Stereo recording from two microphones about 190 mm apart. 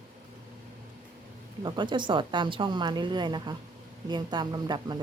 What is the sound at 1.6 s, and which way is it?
A woman's voice, 25° right (ahead or behind).